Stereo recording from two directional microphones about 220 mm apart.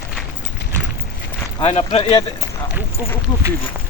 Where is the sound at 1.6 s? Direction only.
25° left (ahead or behind).